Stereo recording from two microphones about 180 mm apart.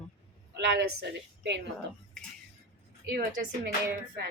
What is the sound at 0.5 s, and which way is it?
Speech, 70° right (ahead or behind).